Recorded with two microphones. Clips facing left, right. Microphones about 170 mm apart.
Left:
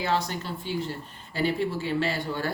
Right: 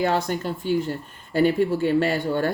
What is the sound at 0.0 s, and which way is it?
Speech, 50° right (ahead or behind).